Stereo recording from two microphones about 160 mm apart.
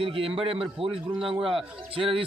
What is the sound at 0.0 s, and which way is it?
Speech, 35° right (ahead or behind).